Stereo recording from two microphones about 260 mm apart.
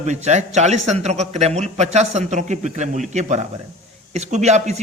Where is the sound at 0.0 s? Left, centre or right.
Right.